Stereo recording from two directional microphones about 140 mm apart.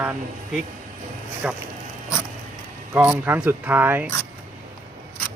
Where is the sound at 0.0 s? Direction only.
10° right (ahead or behind).